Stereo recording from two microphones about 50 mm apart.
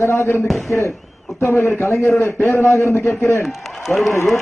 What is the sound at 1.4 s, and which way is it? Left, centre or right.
Speech, left.